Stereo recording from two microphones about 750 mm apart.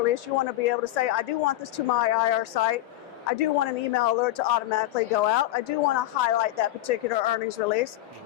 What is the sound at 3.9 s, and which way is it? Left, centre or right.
Speech, left.